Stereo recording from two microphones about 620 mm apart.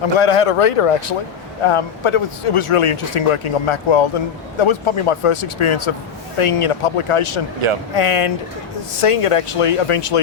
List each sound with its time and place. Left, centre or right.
0.0 s speech: left